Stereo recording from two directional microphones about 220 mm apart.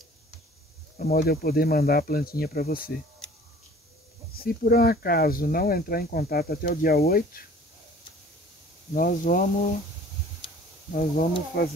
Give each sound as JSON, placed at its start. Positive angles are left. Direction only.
{"t": 0.9, "sound": "speech", "side_deg": 45}
{"t": 4.4, "sound": "speech", "side_deg": 45}
{"t": 8.9, "sound": "speech", "side_deg": 40}
{"t": 10.9, "sound": "speech", "side_deg": 35}